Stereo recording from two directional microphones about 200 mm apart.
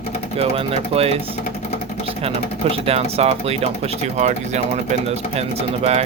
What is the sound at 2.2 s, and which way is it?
Speech, 30° right (ahead or behind).